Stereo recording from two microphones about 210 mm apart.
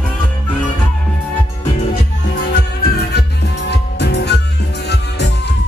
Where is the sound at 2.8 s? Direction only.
50° left (ahead or behind).